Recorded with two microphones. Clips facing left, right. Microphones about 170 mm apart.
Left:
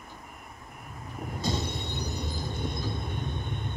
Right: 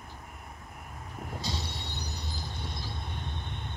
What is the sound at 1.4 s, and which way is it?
Vehicle, 50° left (ahead or behind).